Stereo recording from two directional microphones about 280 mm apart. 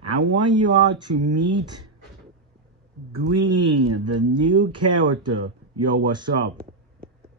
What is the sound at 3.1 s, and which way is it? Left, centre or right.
Speech, centre.